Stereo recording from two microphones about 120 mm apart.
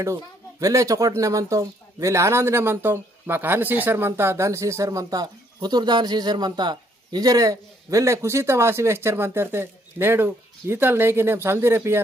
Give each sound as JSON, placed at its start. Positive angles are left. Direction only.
{"t": 0.0, "sound": "speech", "side_deg": -25}